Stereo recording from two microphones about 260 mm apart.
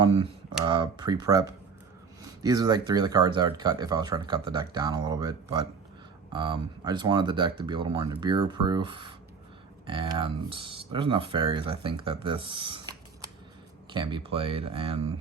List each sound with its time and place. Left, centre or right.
0.0 s speech: right